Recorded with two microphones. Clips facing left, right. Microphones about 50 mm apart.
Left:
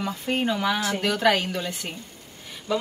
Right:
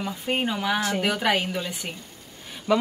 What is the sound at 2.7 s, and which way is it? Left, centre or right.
Speech, right.